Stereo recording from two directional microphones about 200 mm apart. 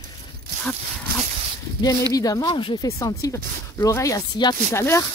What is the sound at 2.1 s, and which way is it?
Speech, 15° left (ahead or behind).